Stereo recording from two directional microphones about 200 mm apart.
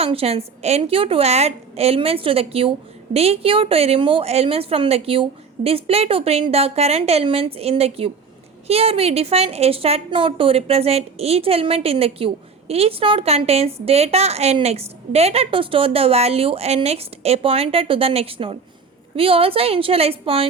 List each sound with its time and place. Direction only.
0.0 s a woman's voice: 30° right (ahead or behind)